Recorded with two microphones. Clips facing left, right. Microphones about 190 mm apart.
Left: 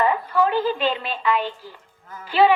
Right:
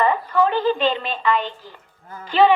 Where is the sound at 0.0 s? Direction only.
10° left (ahead or behind).